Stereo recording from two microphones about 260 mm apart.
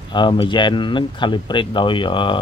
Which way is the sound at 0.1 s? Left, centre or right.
Centre.